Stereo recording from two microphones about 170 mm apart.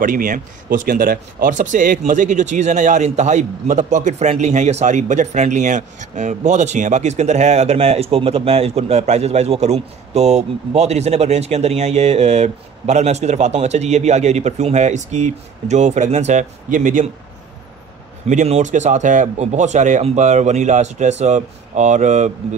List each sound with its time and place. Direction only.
0.0 s speech: 55° right (ahead or behind)
18.2 s speech: 40° right (ahead or behind)